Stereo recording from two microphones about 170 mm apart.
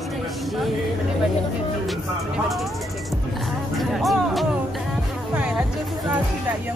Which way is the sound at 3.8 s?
Centre (ahead or behind).